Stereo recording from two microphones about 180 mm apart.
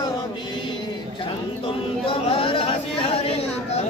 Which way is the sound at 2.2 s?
30° left (ahead or behind).